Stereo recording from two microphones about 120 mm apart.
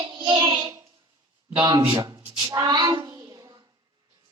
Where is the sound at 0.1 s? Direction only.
40° right (ahead or behind).